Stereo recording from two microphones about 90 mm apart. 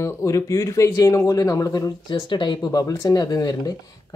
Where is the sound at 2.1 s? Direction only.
60° left (ahead or behind).